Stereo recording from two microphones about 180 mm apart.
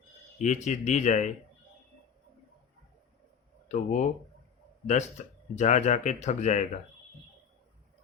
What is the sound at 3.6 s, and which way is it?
Speech, 45° left (ahead or behind).